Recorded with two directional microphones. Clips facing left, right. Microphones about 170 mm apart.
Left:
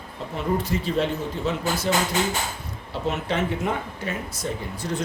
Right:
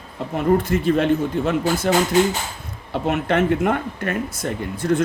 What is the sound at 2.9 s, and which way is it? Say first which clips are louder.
Speech: right 6 dB; 55° right (ahead or behind).